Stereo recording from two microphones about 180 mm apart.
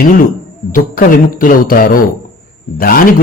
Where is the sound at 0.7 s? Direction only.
50° left (ahead or behind).